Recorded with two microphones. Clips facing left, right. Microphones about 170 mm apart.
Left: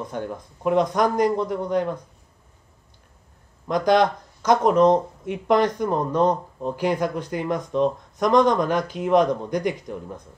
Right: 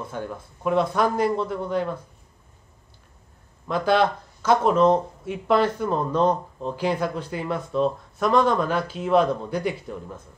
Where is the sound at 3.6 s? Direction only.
15° left (ahead or behind).